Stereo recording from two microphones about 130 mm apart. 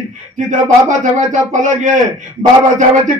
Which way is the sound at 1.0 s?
70° right (ahead or behind).